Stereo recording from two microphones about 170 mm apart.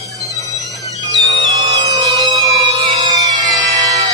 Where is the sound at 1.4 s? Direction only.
25° right (ahead or behind).